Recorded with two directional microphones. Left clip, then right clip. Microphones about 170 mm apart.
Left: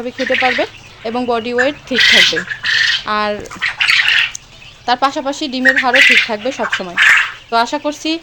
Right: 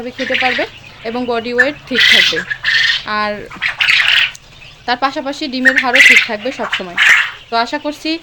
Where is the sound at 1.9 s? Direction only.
5° left (ahead or behind).